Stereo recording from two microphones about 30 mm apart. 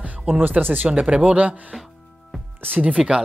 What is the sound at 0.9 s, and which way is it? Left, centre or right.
Speech, right.